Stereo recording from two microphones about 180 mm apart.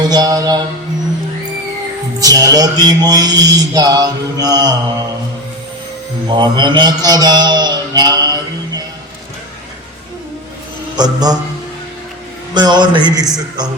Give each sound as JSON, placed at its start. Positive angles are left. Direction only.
{"t": 0.0, "sound": "mantra", "side_deg": -20}
{"t": 2.1, "sound": "mantra", "side_deg": -20}
{"t": 6.2, "sound": "mantra", "side_deg": -25}
{"t": 10.9, "sound": "mantra", "side_deg": -20}
{"t": 12.5, "sound": "mantra", "side_deg": -25}